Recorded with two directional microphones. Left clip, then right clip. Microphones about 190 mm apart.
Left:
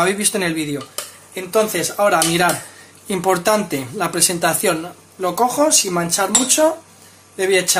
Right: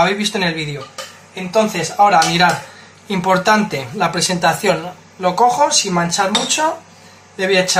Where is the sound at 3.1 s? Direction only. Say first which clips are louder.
Right 3 dB; 65° left (ahead or behind).